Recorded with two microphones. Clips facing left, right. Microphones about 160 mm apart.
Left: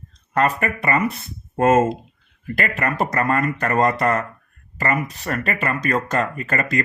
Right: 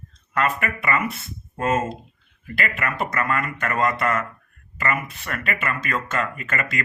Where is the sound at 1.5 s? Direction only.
50° left (ahead or behind).